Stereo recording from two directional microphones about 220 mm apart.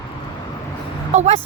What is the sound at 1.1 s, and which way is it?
Speech, 30° right (ahead or behind).